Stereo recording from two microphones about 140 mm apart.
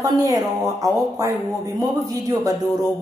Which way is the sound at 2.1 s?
25° right (ahead or behind).